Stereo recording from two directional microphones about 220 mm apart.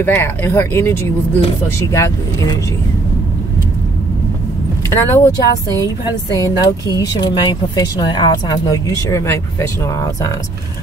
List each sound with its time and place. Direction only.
0.0 s speech: 10° left (ahead or behind)
4.8 s speech: 15° left (ahead or behind)